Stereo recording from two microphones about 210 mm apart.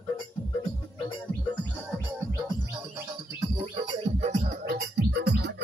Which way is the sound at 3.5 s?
25° right (ahead or behind).